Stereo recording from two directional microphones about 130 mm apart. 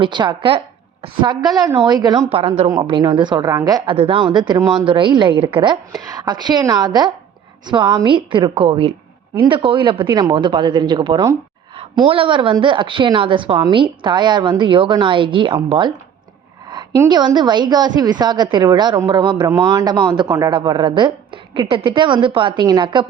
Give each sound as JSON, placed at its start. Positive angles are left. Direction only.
{"t": 0.0, "sound": "a woman's voice", "side_deg": -35}
{"t": 3.8, "sound": "a woman's voice", "side_deg": -45}
{"t": 4.2, "sound": "a woman's voice", "side_deg": -35}
{"t": 6.1, "sound": "a woman's voice", "side_deg": -30}
{"t": 9.4, "sound": "a woman's voice", "side_deg": -35}
{"t": 17.1, "sound": "a woman's voice", "side_deg": -35}